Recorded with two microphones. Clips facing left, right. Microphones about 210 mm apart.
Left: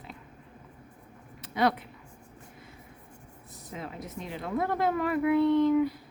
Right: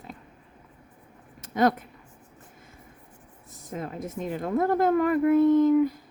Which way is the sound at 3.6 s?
45° right (ahead or behind).